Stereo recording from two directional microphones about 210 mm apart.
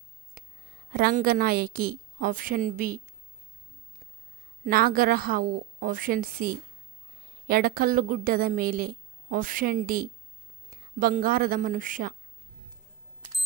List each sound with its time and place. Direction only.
0.4 s a sound: 45° right (ahead or behind)
0.9 s a woman's voice: 45° right (ahead or behind)
4.6 s a woman's voice: 45° right (ahead or behind)